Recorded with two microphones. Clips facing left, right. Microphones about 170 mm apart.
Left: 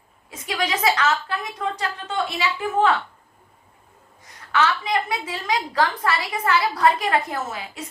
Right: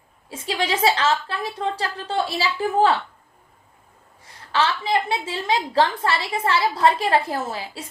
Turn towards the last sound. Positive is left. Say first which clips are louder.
# right 1 dB
turn(degrees=-30)  # may be behind; listen again after turning